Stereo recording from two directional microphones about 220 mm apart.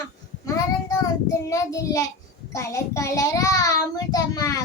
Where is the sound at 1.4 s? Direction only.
15° left (ahead or behind).